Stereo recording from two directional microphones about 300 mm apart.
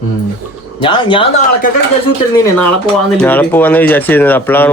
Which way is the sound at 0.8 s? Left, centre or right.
Centre.